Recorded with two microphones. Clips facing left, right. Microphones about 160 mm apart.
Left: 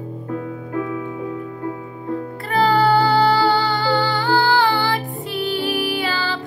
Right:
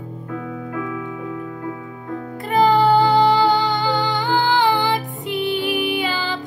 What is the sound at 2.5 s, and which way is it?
Music, 15° right (ahead or behind).